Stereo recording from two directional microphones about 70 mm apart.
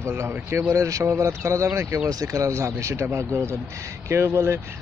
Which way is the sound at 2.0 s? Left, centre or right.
Right.